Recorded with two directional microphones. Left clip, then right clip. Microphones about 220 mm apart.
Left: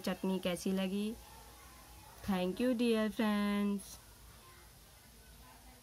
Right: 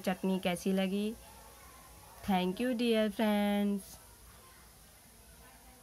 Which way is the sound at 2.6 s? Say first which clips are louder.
Left 1 dB; 45° right (ahead or behind).